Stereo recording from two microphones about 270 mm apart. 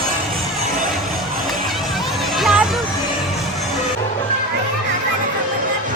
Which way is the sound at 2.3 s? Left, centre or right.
Centre.